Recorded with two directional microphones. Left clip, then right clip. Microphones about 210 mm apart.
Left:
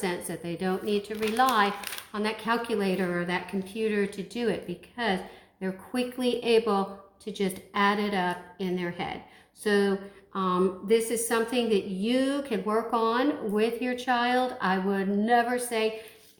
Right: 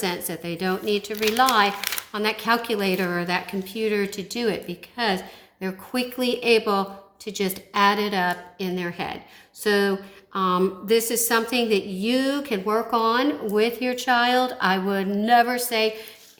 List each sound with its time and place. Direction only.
0.0 s a woman's voice: 35° right (ahead or behind)